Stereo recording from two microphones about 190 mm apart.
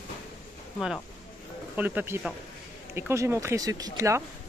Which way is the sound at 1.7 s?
10° right (ahead or behind).